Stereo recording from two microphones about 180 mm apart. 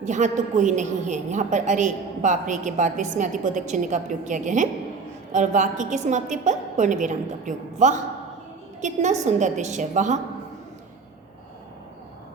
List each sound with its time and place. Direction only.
0.0 s a woman's voice: 40° right (ahead or behind)